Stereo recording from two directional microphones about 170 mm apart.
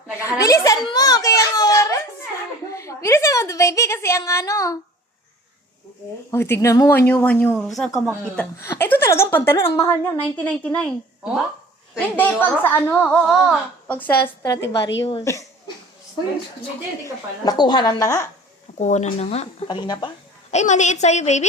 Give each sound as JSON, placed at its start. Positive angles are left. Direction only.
{"t": 0.2, "sound": "a woman's voice", "side_deg": 20}
{"t": 6.3, "sound": "speech", "side_deg": 15}
{"t": 11.9, "sound": "speech", "side_deg": 10}
{"t": 14.2, "sound": "a woman's voice", "side_deg": 20}
{"t": 17.4, "sound": "a woman's voice", "side_deg": 25}
{"t": 18.8, "sound": "speech", "side_deg": 45}
{"t": 19.6, "sound": "a woman's voice", "side_deg": 25}
{"t": 20.5, "sound": "a woman's voice", "side_deg": 45}